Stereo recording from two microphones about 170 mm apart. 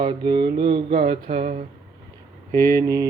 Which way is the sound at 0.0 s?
25° right (ahead or behind).